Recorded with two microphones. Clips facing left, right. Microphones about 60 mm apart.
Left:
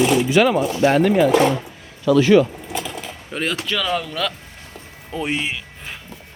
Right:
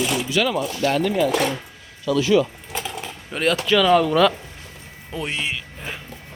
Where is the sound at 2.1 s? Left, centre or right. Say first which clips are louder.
Left 4 dB; left.